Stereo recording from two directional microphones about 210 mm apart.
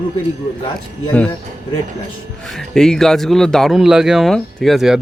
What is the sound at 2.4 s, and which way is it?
Speech, centre (ahead or behind).